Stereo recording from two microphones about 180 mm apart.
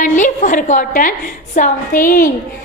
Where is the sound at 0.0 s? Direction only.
45° left (ahead or behind).